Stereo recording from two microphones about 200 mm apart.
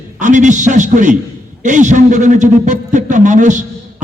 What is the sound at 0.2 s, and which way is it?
A man's voice, 40° right (ahead or behind).